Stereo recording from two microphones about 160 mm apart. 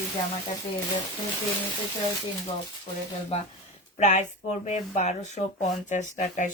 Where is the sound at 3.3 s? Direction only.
40° left (ahead or behind).